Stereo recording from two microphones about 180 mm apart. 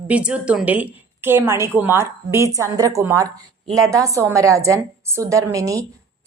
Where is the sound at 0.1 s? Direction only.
5° right (ahead or behind).